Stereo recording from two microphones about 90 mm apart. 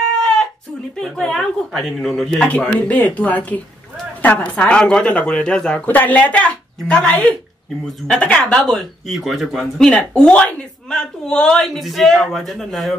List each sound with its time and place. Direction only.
0.9 s speech: 10° left (ahead or behind)